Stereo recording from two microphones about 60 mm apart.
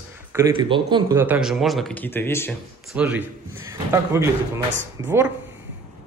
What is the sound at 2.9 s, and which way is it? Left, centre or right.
Speech, right.